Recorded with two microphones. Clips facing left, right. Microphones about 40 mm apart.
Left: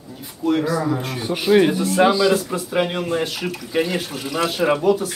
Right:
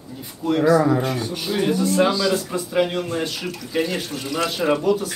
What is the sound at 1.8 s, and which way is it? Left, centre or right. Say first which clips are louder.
Speech: left 2 dB; centre.